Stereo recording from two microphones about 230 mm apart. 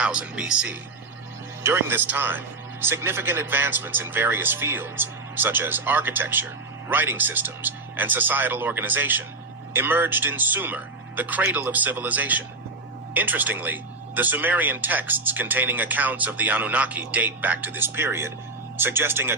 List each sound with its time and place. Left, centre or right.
0.0 s speech: centre